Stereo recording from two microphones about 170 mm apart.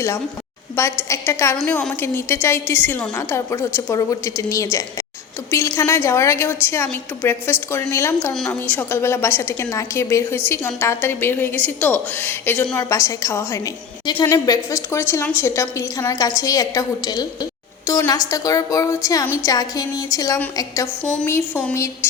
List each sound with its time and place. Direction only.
0.8 s a woman's voice: 15° left (ahead or behind)
8.3 s a woman's voice: 5° left (ahead or behind); by 20.4 s 20° left (ahead or behind)
21.0 s a woman's voice: 5° left (ahead or behind)